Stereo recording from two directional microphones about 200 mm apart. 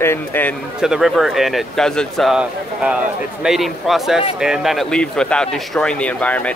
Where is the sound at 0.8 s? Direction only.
Centre (ahead or behind).